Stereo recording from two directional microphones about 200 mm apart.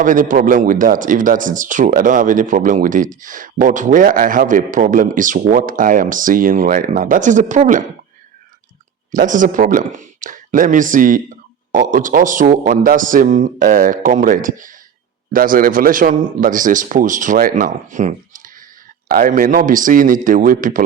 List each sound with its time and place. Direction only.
0.0 s a man's voice: 40° right (ahead or behind)
9.1 s a man's voice: 40° right (ahead or behind)